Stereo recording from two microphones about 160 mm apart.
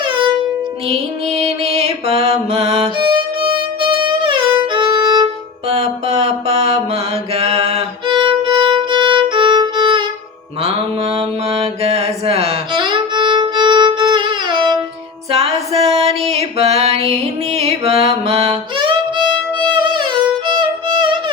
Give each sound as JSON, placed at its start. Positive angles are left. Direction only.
{"t": 0.9, "sound": "music", "side_deg": -40}
{"t": 3.4, "sound": "violin", "side_deg": -30}
{"t": 5.6, "sound": "mantra", "side_deg": -40}
{"t": 15.3, "sound": "music", "side_deg": -40}